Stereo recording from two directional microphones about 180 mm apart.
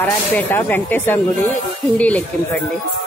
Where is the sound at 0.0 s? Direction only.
10° left (ahead or behind).